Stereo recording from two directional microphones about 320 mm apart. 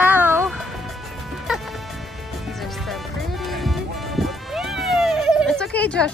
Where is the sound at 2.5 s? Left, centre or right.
Centre.